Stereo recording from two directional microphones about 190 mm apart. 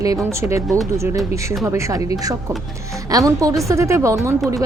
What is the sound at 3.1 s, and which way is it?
A woman's voice, 20° right (ahead or behind).